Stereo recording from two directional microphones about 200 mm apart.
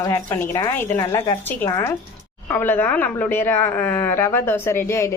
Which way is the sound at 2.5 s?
10° left (ahead or behind).